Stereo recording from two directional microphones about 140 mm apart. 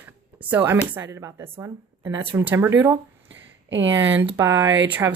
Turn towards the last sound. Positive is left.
turn(degrees=-20)  # may be behind; listen again after turning